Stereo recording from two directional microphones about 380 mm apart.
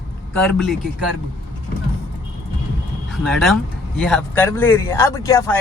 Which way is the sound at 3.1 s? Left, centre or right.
Centre.